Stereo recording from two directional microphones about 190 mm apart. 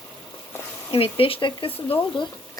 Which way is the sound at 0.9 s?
30° left (ahead or behind).